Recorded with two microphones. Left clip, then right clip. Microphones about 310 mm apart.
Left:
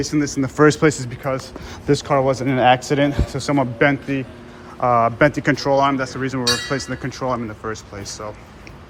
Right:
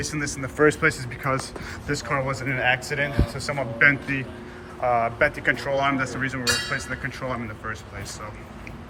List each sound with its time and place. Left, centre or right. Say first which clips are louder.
0.0 s speech: left 8 dB; centre
2.5 s a man's voice: left 7 dB; left
3.1 s a man's voice: left 6 dB; centre